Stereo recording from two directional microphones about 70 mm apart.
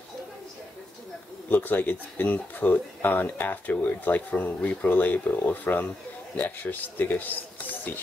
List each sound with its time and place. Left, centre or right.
1.5 s speech: left